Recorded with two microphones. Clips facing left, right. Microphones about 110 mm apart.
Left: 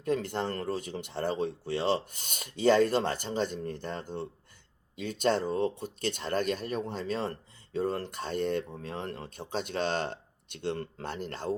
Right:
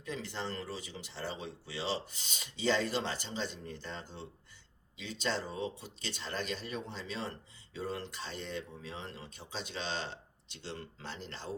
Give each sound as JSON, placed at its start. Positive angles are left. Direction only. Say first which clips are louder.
{"t": 0.0, "sound": "speech", "louder": "left 9 dB", "side_deg": 55}